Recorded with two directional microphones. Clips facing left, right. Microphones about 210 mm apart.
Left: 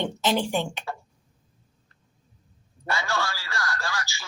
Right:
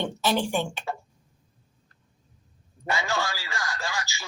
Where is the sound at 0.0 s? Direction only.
15° left (ahead or behind).